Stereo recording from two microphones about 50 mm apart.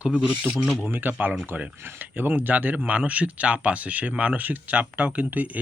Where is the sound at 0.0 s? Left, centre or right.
Right.